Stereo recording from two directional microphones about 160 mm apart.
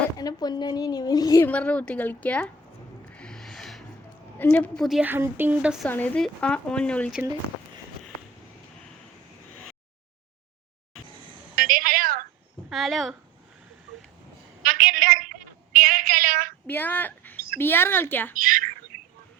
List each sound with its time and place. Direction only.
0.2 s speech: 25° left (ahead or behind)
1.5 s speech: 10° left (ahead or behind)
3.1 s music: 5° left (ahead or behind)
4.4 s a woman's voice: 10° left (ahead or behind)
5.0 s a woman's voice: 15° right (ahead or behind)
5.9 s speech: 10° left (ahead or behind)
11.5 s a sound: 60° right (ahead or behind)
12.7 s a woman's voice: centre (ahead or behind)
14.6 s a sound: 60° right (ahead or behind)
16.6 s a woman's voice: 10° left (ahead or behind)
18.4 s speech: 60° right (ahead or behind)
18.9 s a sound: 5° left (ahead or behind)